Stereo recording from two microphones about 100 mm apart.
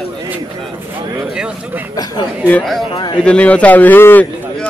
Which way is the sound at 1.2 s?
10° right (ahead or behind).